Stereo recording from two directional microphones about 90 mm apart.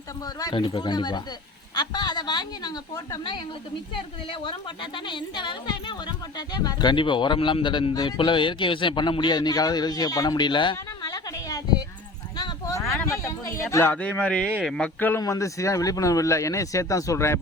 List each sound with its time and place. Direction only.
0.5 s speech: 65° left (ahead or behind); by 3.2 s 45° left (ahead or behind)
4.3 s speech: 60° left (ahead or behind)
6.9 s speech: 65° left (ahead or behind); by 11.8 s 45° left (ahead or behind)
12.4 s clip-clop: 45° left (ahead or behind)
13.1 s speech: 35° left (ahead or behind)
13.8 s speech: 15° left (ahead or behind)
14.9 s speech: 20° left (ahead or behind)
15.2 s speech: 35° left (ahead or behind)